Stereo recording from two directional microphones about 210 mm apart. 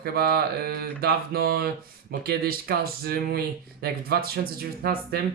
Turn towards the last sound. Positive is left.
turn(degrees=-45)  # may be behind; listen again after turning